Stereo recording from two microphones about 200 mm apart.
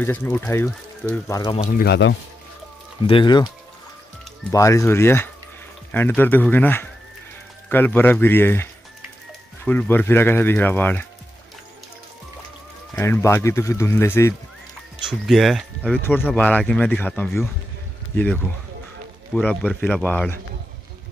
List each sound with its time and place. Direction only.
0.0 s speech: 10° left (ahead or behind)
1.2 s speech: 15° left (ahead or behind)
1.7 s speech: 45° left (ahead or behind)
3.1 s speech: 25° left (ahead or behind)
4.5 s speech: 15° left (ahead or behind)
9.7 s speech: 10° left (ahead or behind)
12.9 s speech: 10° left (ahead or behind)
15.0 s speech: centre (ahead or behind)